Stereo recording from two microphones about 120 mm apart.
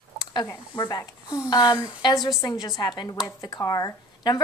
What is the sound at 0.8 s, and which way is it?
A woman's voice, 30° left (ahead or behind).